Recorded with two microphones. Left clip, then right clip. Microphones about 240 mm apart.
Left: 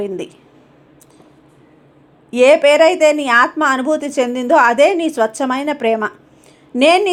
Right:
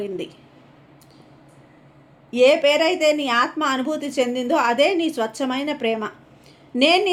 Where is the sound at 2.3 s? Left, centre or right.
Left.